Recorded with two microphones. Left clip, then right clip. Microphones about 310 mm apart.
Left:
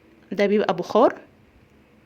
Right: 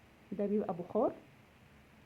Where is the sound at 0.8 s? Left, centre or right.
Left.